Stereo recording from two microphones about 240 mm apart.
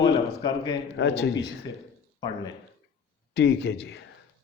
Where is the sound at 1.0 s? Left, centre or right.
Left.